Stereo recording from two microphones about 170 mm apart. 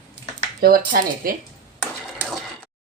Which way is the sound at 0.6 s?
55° right (ahead or behind).